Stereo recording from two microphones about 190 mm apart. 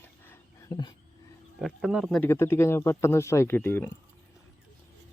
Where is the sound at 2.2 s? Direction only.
15° left (ahead or behind).